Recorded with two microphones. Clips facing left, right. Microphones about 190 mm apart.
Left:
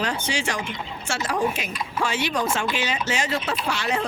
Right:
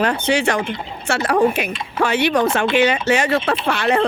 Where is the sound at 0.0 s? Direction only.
60° right (ahead or behind).